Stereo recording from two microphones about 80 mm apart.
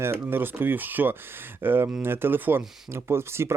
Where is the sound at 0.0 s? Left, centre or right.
Right.